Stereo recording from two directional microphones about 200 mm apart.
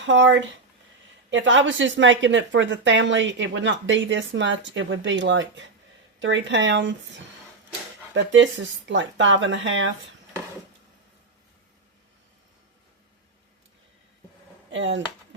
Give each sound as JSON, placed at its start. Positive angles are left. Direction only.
{"t": 0.0, "sound": "speech", "side_deg": -65}
{"t": 8.1, "sound": "speech", "side_deg": -65}
{"t": 14.7, "sound": "speech", "side_deg": -65}